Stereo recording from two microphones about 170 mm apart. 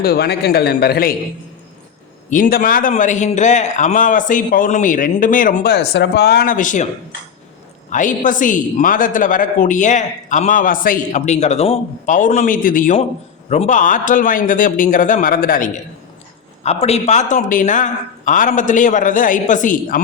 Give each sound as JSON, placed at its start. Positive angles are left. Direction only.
{"t": 0.0, "sound": "a man's voice", "side_deg": 65}
{"t": 2.3, "sound": "a woman's voice", "side_deg": 55}
{"t": 7.9, "sound": "a woman's voice", "side_deg": 50}
{"t": 16.6, "sound": "a woman's voice", "side_deg": 40}